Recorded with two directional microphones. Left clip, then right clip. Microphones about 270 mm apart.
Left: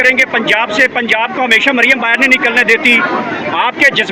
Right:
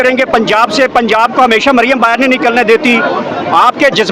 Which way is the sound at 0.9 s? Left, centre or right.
Right.